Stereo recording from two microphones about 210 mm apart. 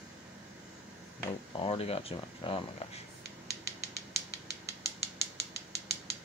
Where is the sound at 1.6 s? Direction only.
25° left (ahead or behind).